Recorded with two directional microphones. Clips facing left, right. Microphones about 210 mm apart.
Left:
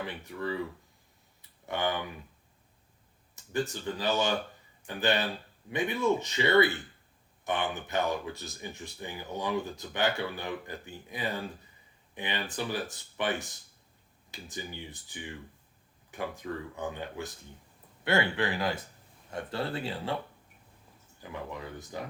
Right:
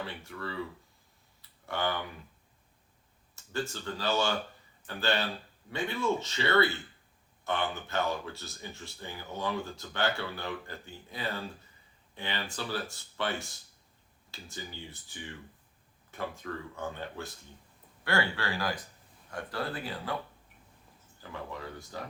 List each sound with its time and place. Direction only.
0.0 s speech: 15° left (ahead or behind)
1.4 s tick-tock: 20° left (ahead or behind)
3.3 s speech: 15° left (ahead or behind)
21.5 s speech: 20° left (ahead or behind)